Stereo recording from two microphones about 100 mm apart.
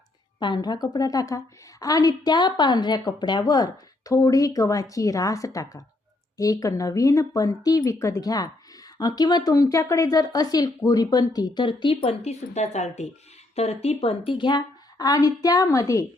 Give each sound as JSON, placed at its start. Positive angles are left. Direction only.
{"t": 0.3, "sound": "a woman's voice", "side_deg": 50}
{"t": 13.6, "sound": "a woman's voice", "side_deg": 90}